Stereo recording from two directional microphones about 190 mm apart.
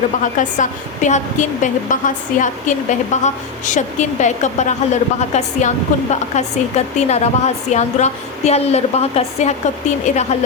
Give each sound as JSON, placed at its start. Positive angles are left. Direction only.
{"t": 0.3, "sound": "a woman's voice", "side_deg": 40}